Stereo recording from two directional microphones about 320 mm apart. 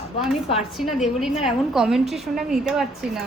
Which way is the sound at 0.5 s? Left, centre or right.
Centre.